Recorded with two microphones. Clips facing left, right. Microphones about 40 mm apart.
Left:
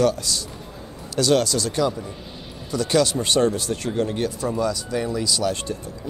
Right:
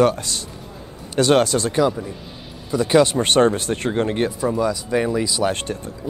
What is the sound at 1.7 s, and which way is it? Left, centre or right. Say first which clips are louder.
Speech: right 4 dB; right.